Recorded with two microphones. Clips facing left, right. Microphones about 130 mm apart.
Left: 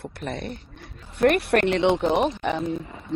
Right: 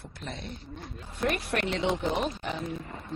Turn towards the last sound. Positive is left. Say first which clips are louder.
# left 2 dB
turn(degrees=0)  # may be behind; listen again after turning